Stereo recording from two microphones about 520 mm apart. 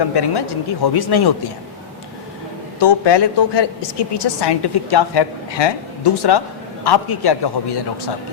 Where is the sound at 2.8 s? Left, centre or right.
Left.